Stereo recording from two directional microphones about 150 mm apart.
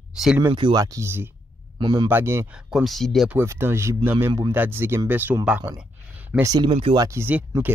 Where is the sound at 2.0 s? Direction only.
15° right (ahead or behind).